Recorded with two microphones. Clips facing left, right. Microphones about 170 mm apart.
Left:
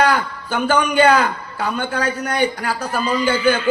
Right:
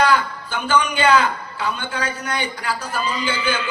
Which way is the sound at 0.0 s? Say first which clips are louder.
Left 1 dB; 50° left (ahead or behind).